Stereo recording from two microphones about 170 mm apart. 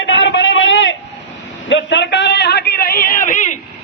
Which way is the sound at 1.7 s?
90° left.